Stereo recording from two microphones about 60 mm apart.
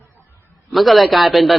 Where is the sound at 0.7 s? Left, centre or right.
Centre.